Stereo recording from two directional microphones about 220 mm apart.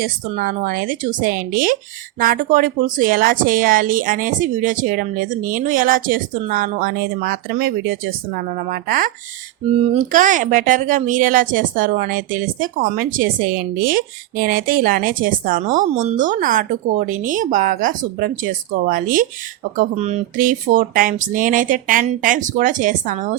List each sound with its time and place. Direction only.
0.0 s a woman's voice: 40° right (ahead or behind)